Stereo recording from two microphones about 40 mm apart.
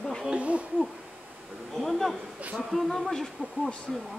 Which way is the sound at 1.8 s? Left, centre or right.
Centre.